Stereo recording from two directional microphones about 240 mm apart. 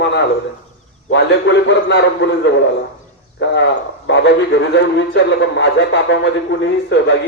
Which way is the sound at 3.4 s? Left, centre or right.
Left.